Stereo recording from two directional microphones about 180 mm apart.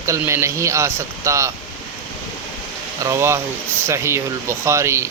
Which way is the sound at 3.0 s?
15° right (ahead or behind).